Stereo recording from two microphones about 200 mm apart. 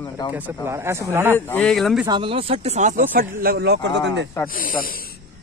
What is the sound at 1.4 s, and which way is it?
Speech, 10° left (ahead or behind).